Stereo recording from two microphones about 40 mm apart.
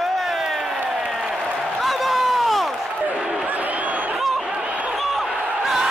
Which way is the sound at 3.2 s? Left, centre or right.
Right.